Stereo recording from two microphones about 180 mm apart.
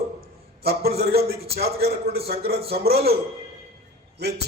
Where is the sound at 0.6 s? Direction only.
60° right (ahead or behind).